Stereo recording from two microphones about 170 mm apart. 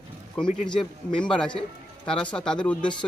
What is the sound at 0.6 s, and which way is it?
Speech, 5° left (ahead or behind).